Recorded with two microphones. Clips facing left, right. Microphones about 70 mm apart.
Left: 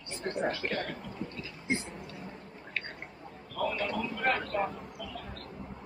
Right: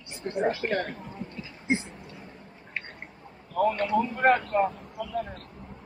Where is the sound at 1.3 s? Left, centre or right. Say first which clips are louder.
Right 6 dB; right.